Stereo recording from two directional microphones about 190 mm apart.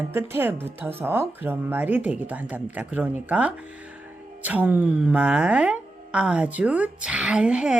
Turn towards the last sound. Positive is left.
turn(degrees=-5)  # may be behind; listen again after turning